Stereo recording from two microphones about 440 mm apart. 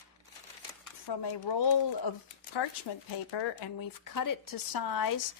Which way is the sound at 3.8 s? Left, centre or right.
Left.